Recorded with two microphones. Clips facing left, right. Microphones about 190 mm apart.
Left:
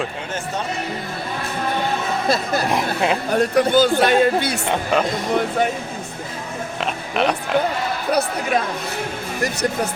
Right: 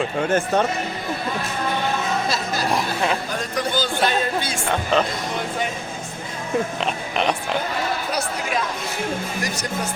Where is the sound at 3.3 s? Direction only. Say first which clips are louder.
Left 8 dB; 60° left (ahead or behind).